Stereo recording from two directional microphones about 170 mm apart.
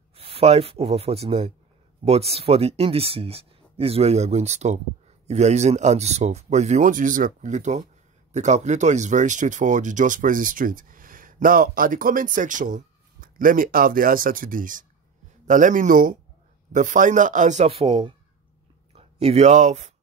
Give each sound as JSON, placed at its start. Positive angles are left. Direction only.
{"t": 0.1, "sound": "speech", "side_deg": -35}